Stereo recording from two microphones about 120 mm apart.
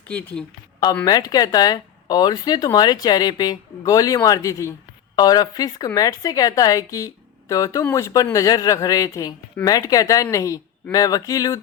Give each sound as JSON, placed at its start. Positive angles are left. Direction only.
{"t": 0.1, "sound": "speech", "side_deg": 15}
{"t": 1.0, "sound": "speech", "side_deg": 35}